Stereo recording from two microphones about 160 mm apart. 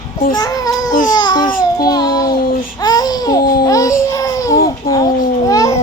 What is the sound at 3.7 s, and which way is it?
Speech, 20° left (ahead or behind).